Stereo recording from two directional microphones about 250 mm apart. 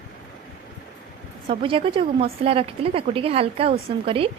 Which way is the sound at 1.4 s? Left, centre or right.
Right.